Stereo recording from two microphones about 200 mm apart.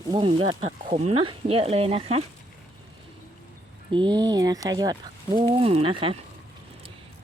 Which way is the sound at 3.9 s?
20° right (ahead or behind).